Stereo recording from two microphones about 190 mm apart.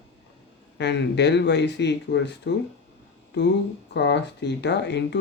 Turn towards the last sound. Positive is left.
turn(degrees=65)  # may be behind; listen again after turning